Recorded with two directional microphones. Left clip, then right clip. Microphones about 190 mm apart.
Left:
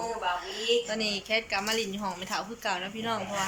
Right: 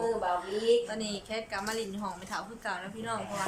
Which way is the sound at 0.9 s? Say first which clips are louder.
Left 7 dB; 5° left (ahead or behind).